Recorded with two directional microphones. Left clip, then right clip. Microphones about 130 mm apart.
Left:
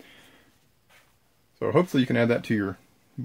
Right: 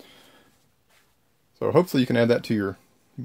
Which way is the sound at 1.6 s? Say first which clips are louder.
Right 2 dB; 65° right (ahead or behind).